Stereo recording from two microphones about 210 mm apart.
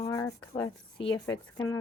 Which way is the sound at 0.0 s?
15° left (ahead or behind).